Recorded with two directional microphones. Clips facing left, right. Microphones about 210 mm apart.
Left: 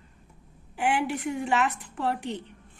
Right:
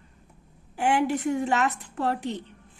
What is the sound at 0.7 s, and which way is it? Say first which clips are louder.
A woman's voice: right 3 dB; 40° right (ahead or behind).